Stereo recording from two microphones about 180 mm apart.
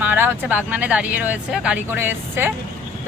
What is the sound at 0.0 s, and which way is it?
Vehicle, 10° right (ahead or behind).